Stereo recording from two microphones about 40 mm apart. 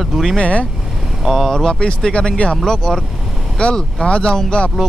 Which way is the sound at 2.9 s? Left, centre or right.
Centre.